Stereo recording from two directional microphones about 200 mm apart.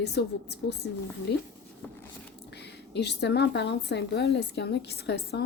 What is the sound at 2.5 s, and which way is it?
A woman's voice, 55° left (ahead or behind).